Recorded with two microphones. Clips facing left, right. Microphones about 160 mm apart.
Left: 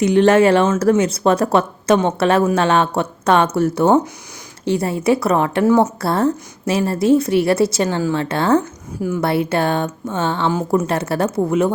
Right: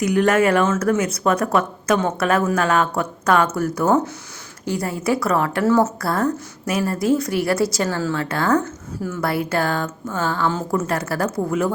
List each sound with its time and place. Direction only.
0.0 s speech: 25° left (ahead or behind)
9.0 s a woman's voice: 15° left (ahead or behind)
9.2 s speech: 25° left (ahead or behind)